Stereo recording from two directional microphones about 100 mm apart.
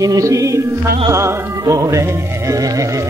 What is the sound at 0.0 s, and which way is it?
Music, 35° right (ahead or behind).